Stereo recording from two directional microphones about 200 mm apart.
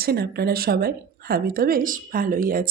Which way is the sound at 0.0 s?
50° right (ahead or behind).